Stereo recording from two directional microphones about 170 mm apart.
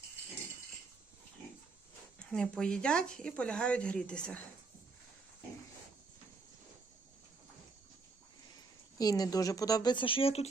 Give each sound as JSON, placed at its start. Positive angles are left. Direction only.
{"t": 2.1, "sound": "speech", "side_deg": 5}
{"t": 9.0, "sound": "speech", "side_deg": 20}